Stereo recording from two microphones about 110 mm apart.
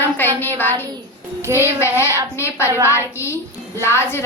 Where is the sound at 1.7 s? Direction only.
25° left (ahead or behind).